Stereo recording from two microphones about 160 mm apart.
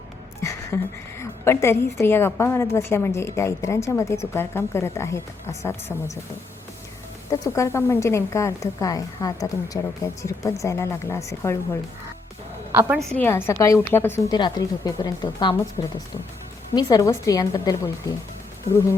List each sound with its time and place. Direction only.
0.7 s a woman's voice: 15° left (ahead or behind)
7.3 s a woman's voice: 20° left (ahead or behind)
13.1 s a woman's voice: 15° left (ahead or behind)
14.3 s a woman's voice: 25° left (ahead or behind)